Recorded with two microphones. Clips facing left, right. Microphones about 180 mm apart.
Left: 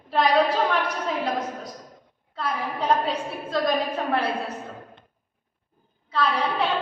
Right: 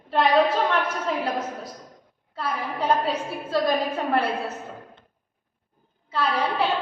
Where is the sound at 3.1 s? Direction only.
5° right (ahead or behind).